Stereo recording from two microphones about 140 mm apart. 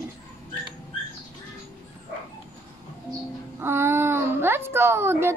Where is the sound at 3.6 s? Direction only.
15° right (ahead or behind).